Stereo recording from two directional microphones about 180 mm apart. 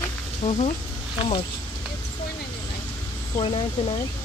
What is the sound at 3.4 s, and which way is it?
Speech, 30° left (ahead or behind).